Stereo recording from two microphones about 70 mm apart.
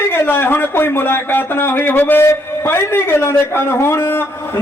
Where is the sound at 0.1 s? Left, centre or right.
Left.